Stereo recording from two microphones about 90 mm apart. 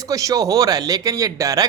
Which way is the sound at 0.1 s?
40° right (ahead or behind).